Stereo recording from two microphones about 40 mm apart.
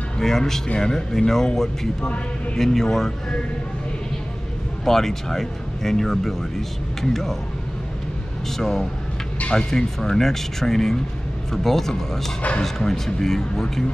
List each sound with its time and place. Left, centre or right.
0.2 s speech: centre
4.8 s speech: centre
8.5 s speech: centre
12.4 s speech: left
12.6 s speech: centre